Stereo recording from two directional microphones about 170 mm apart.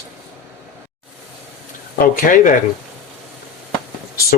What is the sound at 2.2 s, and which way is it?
Speech, 50° left (ahead or behind).